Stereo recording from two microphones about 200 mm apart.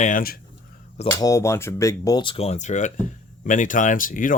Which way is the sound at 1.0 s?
15° left (ahead or behind).